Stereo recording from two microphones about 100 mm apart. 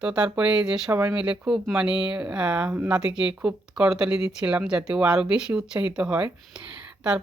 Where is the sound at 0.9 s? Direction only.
25° right (ahead or behind).